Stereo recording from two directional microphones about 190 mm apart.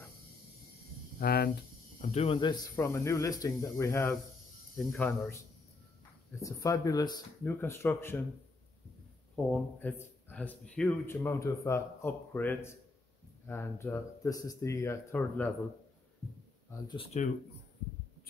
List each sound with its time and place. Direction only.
1.2 s a sound: 55° left (ahead or behind)
2.0 s speech: 30° left (ahead or behind); by 5.4 s 10° left (ahead or behind)
6.4 s speech: 15° left (ahead or behind)
9.3 s speech: 5° left (ahead or behind)
16.8 s speech: 25° left (ahead or behind)